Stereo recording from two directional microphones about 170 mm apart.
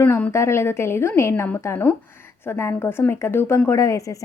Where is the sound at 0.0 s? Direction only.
10° left (ahead or behind).